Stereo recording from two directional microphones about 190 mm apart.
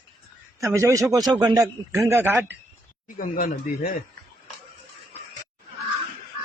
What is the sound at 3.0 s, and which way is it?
Speech, 45° left (ahead or behind).